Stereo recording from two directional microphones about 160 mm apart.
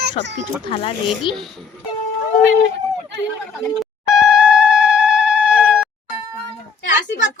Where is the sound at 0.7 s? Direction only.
35° left (ahead or behind).